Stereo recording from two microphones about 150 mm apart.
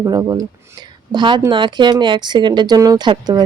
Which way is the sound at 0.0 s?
25° right (ahead or behind).